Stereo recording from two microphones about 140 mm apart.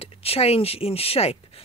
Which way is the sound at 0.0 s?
45° left (ahead or behind).